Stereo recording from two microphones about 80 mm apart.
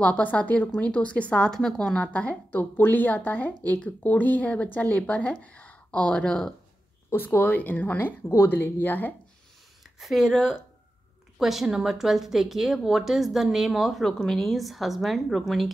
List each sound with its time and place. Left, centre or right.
0.0 s speech: centre
2.0 s a woman's voice: centre
7.3 s a woman's voice: left
9.9 s speech: centre